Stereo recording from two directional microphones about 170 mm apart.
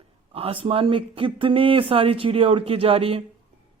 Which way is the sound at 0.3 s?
30° right (ahead or behind).